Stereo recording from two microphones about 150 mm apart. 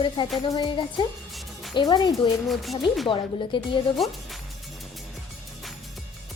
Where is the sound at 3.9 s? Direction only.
Centre (ahead or behind).